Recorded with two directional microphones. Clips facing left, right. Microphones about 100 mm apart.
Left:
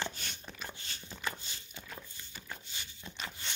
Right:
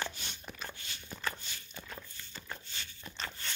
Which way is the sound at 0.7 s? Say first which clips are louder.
Even; 35° left (ahead or behind).